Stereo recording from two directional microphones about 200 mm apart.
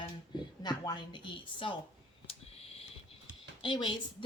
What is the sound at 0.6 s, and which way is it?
A woman's voice, 20° left (ahead or behind).